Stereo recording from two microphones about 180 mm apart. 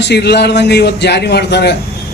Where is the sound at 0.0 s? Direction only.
70° left (ahead or behind).